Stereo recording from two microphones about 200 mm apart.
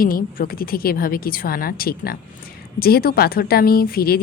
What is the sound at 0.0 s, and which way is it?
Speech, 45° left (ahead or behind).